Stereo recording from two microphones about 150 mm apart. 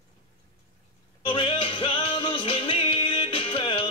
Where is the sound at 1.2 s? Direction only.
35° left (ahead or behind).